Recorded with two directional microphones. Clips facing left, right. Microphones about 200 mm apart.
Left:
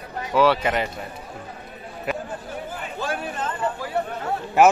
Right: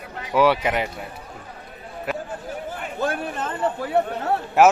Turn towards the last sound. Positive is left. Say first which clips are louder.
# even
turn(degrees=-5)  # may be behind; listen again after turning